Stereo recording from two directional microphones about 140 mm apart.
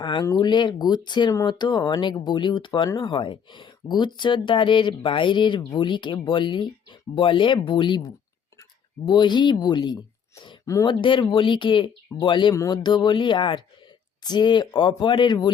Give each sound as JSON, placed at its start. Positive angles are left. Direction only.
{"t": 0.0, "sound": "speech", "side_deg": 30}